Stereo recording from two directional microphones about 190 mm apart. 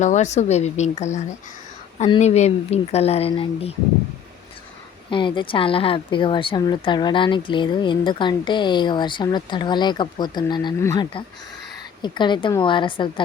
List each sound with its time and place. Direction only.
0.0 s speech: 40° left (ahead or behind)
5.1 s speech: 25° left (ahead or behind)